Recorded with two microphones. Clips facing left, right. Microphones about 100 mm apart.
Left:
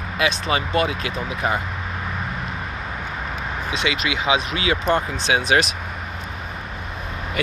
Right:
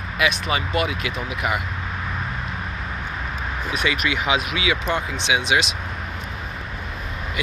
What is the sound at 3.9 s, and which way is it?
Speech, 25° left (ahead or behind).